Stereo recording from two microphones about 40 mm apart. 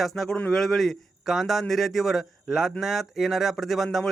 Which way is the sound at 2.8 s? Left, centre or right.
Centre.